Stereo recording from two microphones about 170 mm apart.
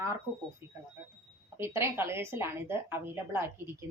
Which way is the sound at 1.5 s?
15° right (ahead or behind).